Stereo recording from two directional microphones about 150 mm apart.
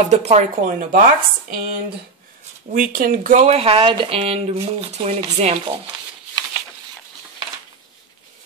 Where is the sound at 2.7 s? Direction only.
70° right (ahead or behind).